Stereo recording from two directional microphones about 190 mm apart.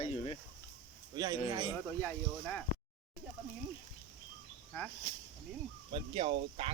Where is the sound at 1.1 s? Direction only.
20° right (ahead or behind).